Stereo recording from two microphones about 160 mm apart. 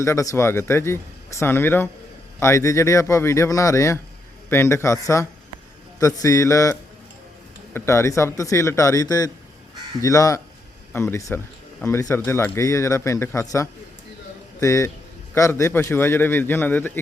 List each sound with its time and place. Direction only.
0.0 s speech: 20° left (ahead or behind)